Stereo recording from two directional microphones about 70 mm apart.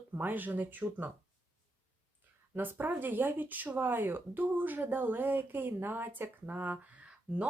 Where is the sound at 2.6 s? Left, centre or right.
Right.